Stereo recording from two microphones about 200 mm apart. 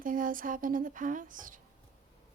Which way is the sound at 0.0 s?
40° right (ahead or behind).